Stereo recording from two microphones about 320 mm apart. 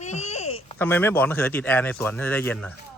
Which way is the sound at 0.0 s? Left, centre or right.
Left.